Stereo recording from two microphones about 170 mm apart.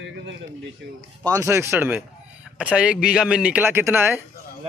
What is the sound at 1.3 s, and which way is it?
A man's voice, 15° right (ahead or behind).